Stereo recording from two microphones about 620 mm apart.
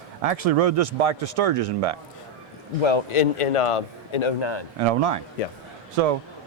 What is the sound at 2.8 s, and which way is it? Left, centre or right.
A man's voice, left.